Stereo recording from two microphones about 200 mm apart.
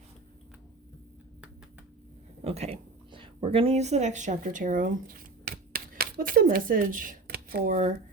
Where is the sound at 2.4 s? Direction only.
30° right (ahead or behind).